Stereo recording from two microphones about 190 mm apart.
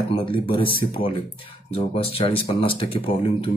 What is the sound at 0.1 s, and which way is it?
Speech, 25° left (ahead or behind).